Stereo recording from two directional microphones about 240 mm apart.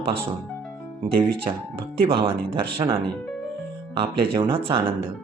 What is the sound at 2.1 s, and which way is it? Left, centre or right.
Speech, right.